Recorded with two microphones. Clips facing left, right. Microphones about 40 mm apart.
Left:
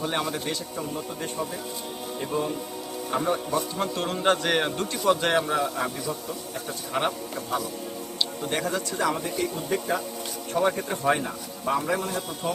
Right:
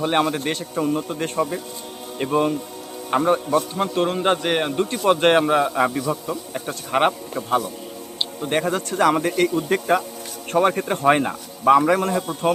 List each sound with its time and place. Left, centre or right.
0.0 s speech: right
3.2 s speech: right
4.2 s a man's voice: centre
4.9 s a man's voice: right
7.5 s speech: right
9.0 s a man's voice: right
10.5 s speech: right
11.8 s a man's voice: right